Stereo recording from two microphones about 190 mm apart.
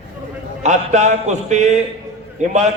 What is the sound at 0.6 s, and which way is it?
A man's voice, 40° right (ahead or behind).